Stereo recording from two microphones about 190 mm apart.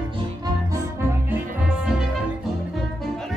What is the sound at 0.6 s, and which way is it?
Music, 15° right (ahead or behind).